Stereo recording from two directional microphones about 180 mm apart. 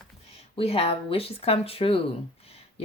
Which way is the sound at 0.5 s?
30° left (ahead or behind).